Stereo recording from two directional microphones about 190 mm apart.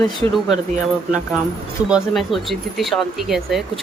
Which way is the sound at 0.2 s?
15° left (ahead or behind).